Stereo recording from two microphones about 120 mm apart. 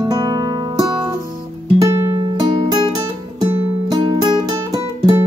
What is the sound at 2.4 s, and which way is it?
Music, 35° right (ahead or behind).